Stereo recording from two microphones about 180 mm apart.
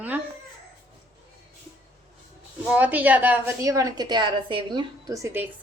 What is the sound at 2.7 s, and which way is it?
A woman's voice, 10° right (ahead or behind).